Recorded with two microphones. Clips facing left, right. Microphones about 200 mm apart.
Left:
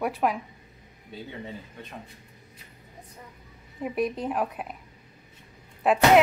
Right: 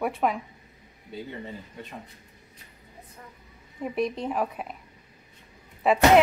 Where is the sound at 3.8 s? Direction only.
5° left (ahead or behind).